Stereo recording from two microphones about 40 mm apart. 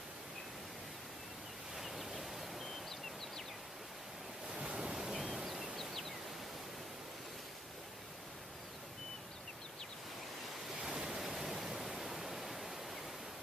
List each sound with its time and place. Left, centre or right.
1.8 s a sound: centre
4.5 s ocean: right
4.9 s waves: centre
11.1 s waterfall: centre